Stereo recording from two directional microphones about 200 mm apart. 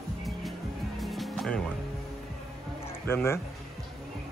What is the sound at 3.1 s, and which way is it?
Speech, 10° left (ahead or behind).